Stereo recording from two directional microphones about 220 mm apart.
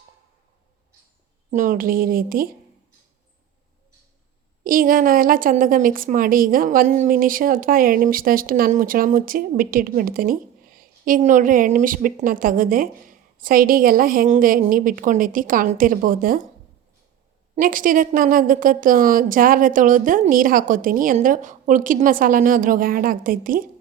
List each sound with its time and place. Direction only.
1.5 s a woman's voice: 35° right (ahead or behind)
4.6 s a woman's voice: 40° right (ahead or behind)
17.5 s a woman's voice: 40° right (ahead or behind)